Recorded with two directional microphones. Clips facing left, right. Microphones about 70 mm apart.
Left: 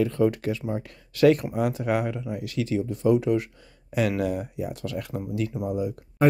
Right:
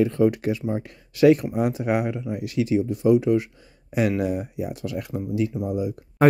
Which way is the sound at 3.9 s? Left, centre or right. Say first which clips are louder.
Right 2 dB; centre.